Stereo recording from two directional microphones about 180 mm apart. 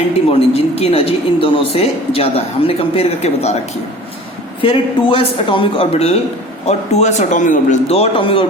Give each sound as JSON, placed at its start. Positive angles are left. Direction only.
{"t": 0.3, "sound": "speech", "side_deg": 35}
{"t": 4.6, "sound": "speech", "side_deg": 30}